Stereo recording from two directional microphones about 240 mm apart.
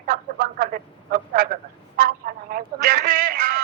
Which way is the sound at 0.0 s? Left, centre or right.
Right.